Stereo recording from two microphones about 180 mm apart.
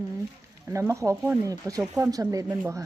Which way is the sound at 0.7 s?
15° right (ahead or behind).